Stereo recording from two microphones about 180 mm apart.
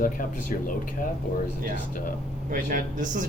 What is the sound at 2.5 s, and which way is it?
Speech, 45° right (ahead or behind).